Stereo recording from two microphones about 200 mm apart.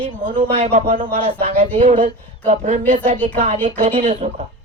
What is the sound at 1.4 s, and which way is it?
A woman's voice, 35° right (ahead or behind).